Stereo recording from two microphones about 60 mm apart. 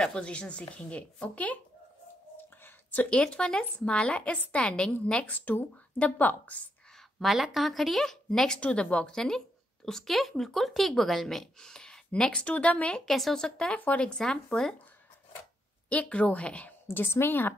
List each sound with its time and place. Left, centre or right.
0.0 s speech: centre
2.6 s a sound: left
3.1 s speech: centre
7.2 s speech: centre
13.0 s speech: centre
13.7 s speech: left
15.9 s speech: left
16.8 s a woman's voice: left